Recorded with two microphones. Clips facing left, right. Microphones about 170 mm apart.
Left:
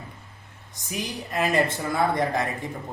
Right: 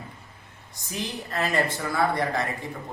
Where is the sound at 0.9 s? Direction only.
15° left (ahead or behind).